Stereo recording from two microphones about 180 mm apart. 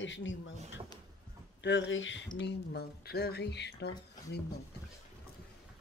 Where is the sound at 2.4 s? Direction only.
65° left (ahead or behind).